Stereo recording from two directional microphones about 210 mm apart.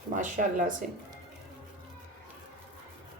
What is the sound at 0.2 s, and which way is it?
Speech, 40° right (ahead or behind).